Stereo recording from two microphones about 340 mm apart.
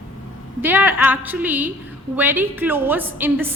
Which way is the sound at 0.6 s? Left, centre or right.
Centre.